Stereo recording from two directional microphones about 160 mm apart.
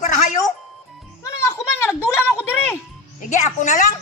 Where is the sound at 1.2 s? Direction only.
15° left (ahead or behind).